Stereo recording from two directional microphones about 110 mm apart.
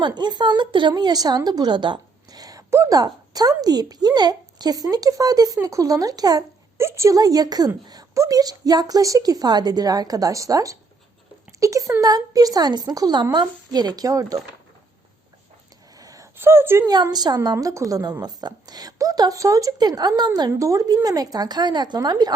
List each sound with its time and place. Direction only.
0.0 s a woman's voice: 40° right (ahead or behind)
6.7 s a woman's voice: 25° right (ahead or behind)
16.0 s a sound: 30° right (ahead or behind)
16.4 s speech: 20° right (ahead or behind)
16.8 s a woman's voice: 40° right (ahead or behind)